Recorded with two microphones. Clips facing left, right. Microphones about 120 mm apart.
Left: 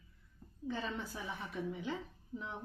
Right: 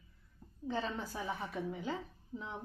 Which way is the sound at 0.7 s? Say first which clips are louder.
Right 2 dB; 40° right (ahead or behind).